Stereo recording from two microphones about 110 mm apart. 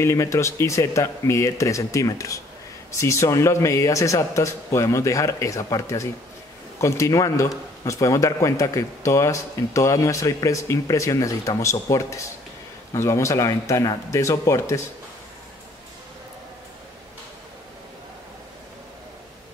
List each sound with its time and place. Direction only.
0.0 s a man's voice: 25° left (ahead or behind)